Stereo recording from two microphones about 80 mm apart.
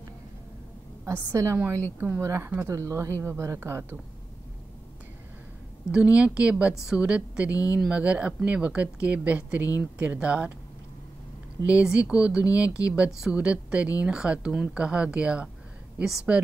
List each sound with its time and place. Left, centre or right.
1.1 s speech: right
5.9 s speech: centre
7.5 s speech: left
7.9 s speech: centre
11.6 s a woman's voice: centre